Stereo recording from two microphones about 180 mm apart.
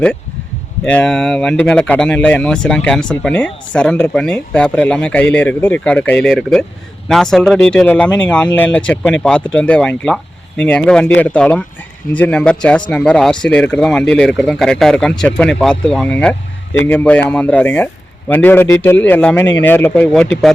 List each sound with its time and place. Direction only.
0.9 s a man's voice: 5° left (ahead or behind)